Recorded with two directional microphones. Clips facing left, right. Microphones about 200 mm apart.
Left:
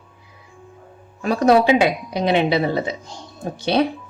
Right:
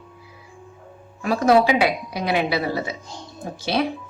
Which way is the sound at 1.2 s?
30° left (ahead or behind).